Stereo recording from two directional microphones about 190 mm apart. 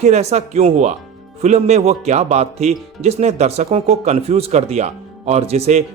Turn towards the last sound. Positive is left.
turn(degrees=-35)  # may be behind; listen again after turning